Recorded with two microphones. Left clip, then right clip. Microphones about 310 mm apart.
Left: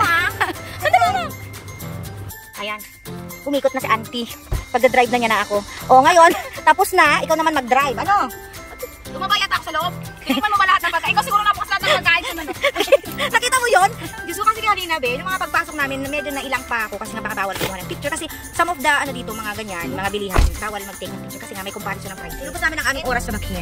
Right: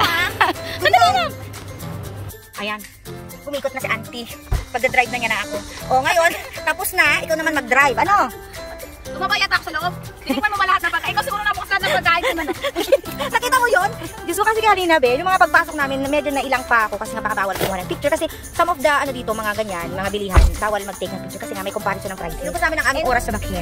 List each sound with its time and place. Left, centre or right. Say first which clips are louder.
0.0 s music: even; centre
3.8 s a woman's voice: left 4 dB; centre
9.7 s speech: left 1 dB; centre
12.2 s speech: right 2 dB; centre